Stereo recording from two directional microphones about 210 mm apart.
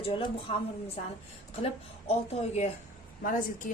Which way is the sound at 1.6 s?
30° left (ahead or behind).